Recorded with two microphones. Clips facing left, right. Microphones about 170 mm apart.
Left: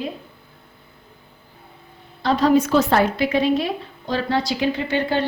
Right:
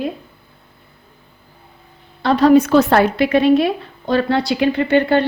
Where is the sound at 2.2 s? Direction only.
65° right (ahead or behind).